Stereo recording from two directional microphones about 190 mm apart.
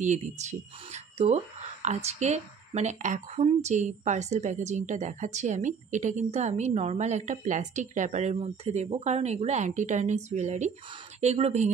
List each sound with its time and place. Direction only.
0.0 s speech: 40° right (ahead or behind)